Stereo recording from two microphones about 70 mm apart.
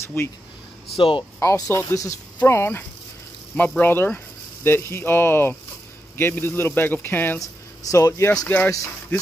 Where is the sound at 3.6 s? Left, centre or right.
Left.